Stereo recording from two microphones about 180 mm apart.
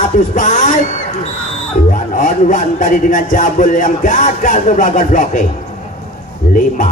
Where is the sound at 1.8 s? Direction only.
45° left (ahead or behind).